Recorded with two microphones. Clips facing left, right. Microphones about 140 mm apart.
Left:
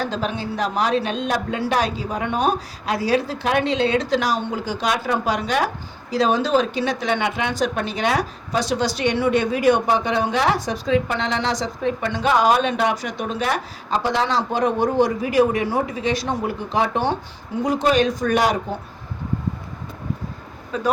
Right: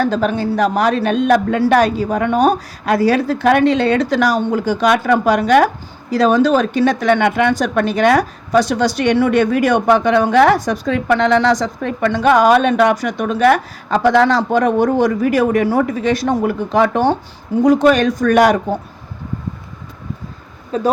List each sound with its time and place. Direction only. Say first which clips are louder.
0.0 s a woman's voice: right 8 dB; 50° right (ahead or behind)
20.7 s speech: right 7 dB; 35° right (ahead or behind)